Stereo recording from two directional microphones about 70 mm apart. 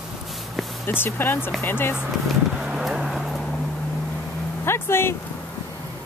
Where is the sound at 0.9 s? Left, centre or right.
Left.